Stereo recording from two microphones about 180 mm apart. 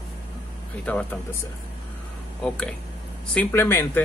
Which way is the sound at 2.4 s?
5° left (ahead or behind).